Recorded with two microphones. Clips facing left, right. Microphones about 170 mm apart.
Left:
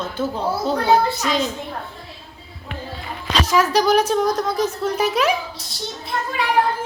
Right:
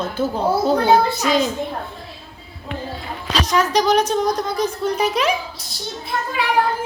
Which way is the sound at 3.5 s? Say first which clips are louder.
Even; 5° left (ahead or behind).